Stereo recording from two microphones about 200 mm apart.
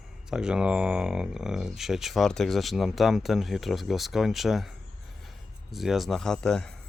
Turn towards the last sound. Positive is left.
turn(degrees=5)  # may be behind; listen again after turning